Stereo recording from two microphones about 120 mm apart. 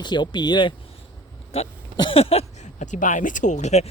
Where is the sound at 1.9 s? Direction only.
40° left (ahead or behind).